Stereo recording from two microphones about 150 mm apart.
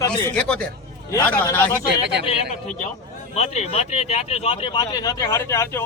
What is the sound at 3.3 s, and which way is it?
A man's voice, 45° left (ahead or behind).